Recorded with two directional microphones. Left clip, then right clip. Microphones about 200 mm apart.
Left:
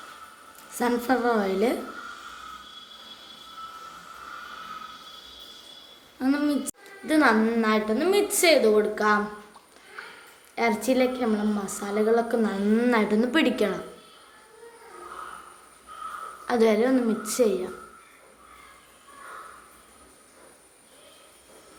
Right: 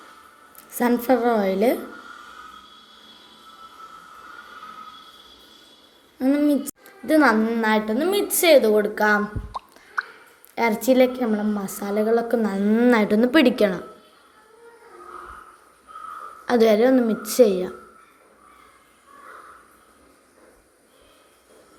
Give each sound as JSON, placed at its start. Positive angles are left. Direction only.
{"t": 0.7, "sound": "a woman's voice", "side_deg": -25}
{"t": 6.1, "sound": "a woman's voice", "side_deg": -20}
{"t": 10.5, "sound": "a woman's voice", "side_deg": -30}
{"t": 16.5, "sound": "a woman's voice", "side_deg": -25}